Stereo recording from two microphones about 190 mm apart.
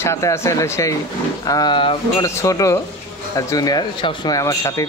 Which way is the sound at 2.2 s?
15° left (ahead or behind).